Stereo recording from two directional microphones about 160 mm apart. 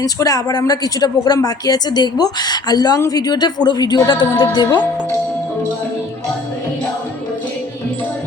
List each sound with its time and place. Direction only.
0.0 s speech: 20° left (ahead or behind)